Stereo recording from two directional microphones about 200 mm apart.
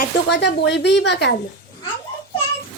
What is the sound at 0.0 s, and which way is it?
Speech, 55° left (ahead or behind).